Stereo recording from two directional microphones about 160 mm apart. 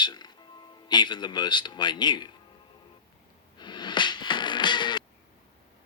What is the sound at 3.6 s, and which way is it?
Music, 25° left (ahead or behind).